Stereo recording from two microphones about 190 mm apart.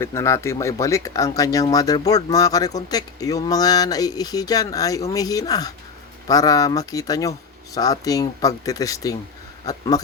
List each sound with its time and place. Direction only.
0.0 s speech: 15° left (ahead or behind)